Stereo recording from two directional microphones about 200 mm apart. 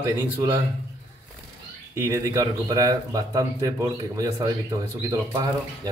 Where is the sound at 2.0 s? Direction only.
15° right (ahead or behind).